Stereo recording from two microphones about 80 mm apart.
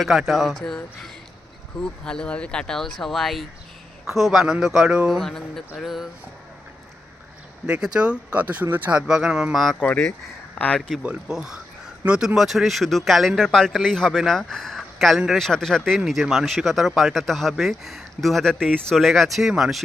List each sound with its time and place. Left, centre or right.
0.0 s speech: centre
1.8 s speech: centre
5.2 s speech: centre
7.7 s speech: centre
8.9 s speech: centre
10.8 s speech: centre
11.0 s speech: centre